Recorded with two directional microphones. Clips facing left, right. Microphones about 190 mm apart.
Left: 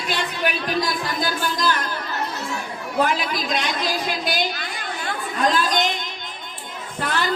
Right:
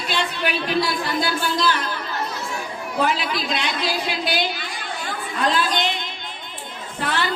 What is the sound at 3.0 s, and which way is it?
A woman's voice, 45° left (ahead or behind).